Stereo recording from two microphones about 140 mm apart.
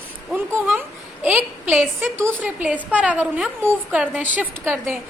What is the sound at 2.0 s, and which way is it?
A woman's voice, 15° right (ahead or behind).